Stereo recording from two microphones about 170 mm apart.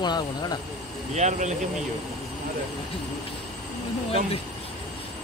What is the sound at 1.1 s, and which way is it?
Speech, 45° right (ahead or behind).